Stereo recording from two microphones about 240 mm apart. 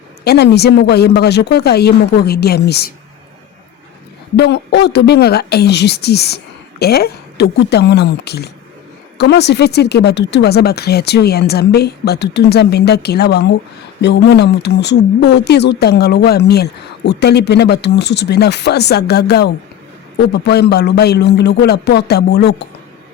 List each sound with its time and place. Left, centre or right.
0.3 s speech: left
4.4 s speech: left